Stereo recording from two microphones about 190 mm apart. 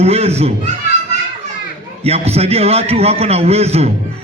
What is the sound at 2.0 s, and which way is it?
A man's voice, 35° right (ahead or behind).